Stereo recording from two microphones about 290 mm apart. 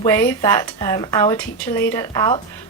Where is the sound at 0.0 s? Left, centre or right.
Centre.